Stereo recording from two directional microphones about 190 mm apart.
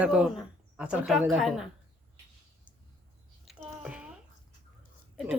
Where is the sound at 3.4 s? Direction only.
Centre (ahead or behind).